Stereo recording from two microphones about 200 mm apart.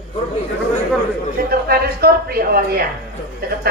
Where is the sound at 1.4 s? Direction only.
50° right (ahead or behind).